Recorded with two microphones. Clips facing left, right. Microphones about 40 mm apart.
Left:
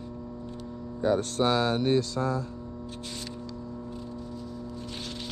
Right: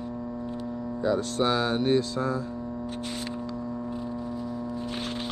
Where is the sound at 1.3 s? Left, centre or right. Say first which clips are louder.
Even; right.